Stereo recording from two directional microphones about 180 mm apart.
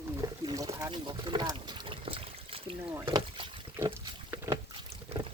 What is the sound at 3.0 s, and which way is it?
Rowboat, 25° right (ahead or behind).